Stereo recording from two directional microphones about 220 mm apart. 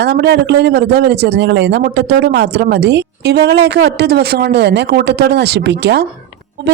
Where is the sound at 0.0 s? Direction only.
50° right (ahead or behind).